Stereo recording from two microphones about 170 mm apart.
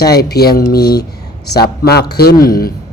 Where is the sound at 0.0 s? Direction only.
70° left (ahead or behind).